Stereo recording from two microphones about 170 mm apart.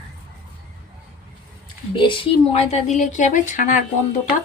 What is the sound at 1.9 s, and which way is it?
Speech, 30° left (ahead or behind).